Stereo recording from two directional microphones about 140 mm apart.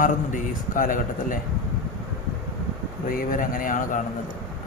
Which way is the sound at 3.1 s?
75° left (ahead or behind).